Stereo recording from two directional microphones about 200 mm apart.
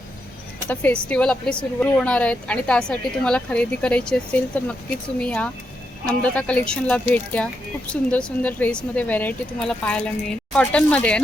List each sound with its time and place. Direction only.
0.7 s a woman's voice: 10° left (ahead or behind)